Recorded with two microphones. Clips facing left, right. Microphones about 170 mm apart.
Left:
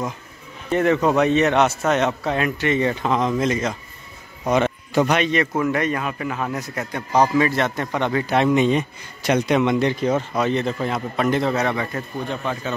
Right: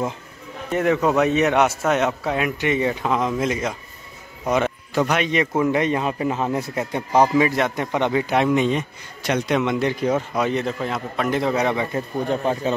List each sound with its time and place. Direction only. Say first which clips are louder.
0.7 s a man's voice: left 1 dB; 5° right (ahead or behind)
5.3 s a man's voice: right 1 dB; 15° right (ahead or behind)
7.2 s a man's voice: right 1 dB; 10° right (ahead or behind)
8.5 s a man's voice: left 2 dB; centre (ahead or behind); by 12.0 s 15° right (ahead or behind)
12.3 s speech: right 7 dB; 35° right (ahead or behind)